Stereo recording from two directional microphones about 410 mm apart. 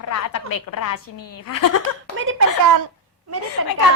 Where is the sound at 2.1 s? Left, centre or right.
Right.